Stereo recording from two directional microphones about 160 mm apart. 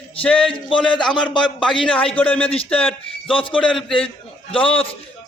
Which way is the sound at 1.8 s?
5° left (ahead or behind).